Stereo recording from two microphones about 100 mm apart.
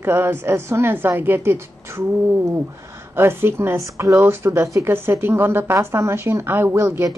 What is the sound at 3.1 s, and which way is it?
Speech, 25° right (ahead or behind).